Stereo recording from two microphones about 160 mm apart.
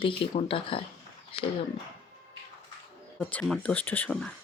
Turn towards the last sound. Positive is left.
turn(degrees=5)  # may be behind; listen again after turning